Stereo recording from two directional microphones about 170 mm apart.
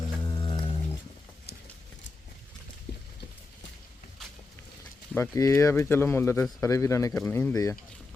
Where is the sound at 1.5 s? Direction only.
75° left (ahead or behind).